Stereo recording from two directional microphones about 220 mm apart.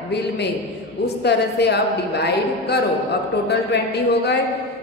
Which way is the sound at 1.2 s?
50° left (ahead or behind).